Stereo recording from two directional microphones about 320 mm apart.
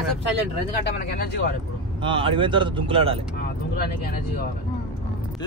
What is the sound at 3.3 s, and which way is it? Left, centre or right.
Speech, left.